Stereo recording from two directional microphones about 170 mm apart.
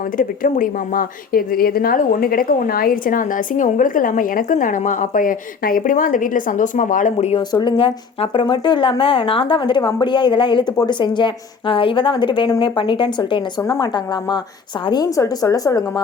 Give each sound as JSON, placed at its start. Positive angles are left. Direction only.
{"t": 0.2, "sound": "a woman's voice", "side_deg": 55}
{"t": 7.3, "sound": "speech", "side_deg": 25}
{"t": 13.6, "sound": "speech", "side_deg": 20}